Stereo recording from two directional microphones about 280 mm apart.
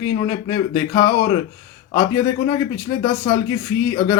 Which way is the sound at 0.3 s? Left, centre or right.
Centre.